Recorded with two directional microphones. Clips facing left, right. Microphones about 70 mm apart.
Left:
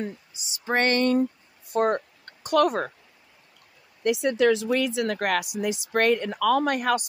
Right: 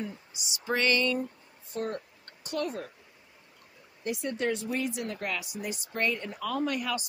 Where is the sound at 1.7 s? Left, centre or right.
Left.